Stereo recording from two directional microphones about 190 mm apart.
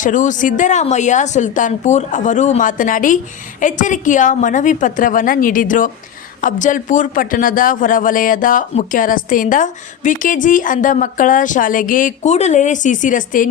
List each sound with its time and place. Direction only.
0.0 s a man's voice: 40° left (ahead or behind)